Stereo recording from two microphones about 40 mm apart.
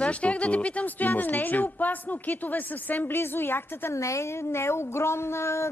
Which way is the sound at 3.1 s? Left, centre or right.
Left.